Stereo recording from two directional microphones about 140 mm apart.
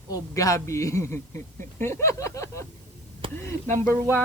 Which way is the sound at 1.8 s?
20° left (ahead or behind).